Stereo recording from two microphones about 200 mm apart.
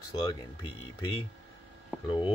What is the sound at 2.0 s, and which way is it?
Speech, 25° left (ahead or behind).